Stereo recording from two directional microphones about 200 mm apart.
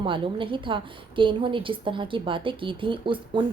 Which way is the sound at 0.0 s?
25° right (ahead or behind).